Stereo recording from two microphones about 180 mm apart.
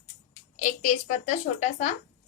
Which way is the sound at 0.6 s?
45° left (ahead or behind).